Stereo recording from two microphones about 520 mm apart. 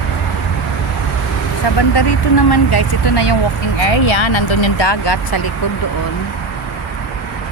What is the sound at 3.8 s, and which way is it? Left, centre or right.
Speech, left.